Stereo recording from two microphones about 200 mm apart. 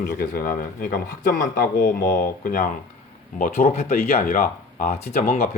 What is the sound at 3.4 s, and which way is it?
Speech, 40° left (ahead or behind).